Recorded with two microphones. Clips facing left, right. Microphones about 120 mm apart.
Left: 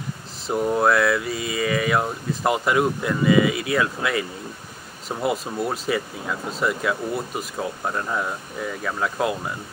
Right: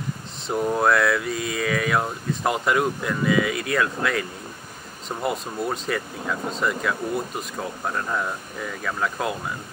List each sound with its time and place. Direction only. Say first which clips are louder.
0.5 s speech: left 1 dB; centre (ahead or behind)